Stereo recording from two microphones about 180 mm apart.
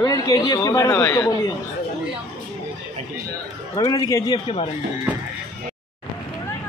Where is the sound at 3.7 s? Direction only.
20° left (ahead or behind).